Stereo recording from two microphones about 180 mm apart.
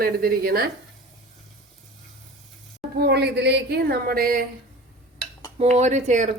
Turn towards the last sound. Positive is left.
turn(degrees=-40)  # may be behind; listen again after turning